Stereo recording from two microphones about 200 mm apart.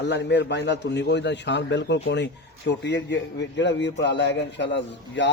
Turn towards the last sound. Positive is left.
turn(degrees=60)  # may be behind; listen again after turning